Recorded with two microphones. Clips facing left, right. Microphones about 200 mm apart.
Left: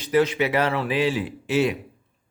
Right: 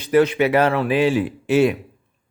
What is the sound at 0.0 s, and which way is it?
Speech, 55° right (ahead or behind).